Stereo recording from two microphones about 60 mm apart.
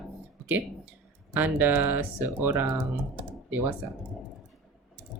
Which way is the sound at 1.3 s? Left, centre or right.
Right.